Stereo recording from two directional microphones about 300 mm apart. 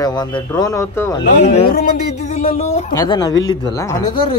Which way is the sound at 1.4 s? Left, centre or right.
Left.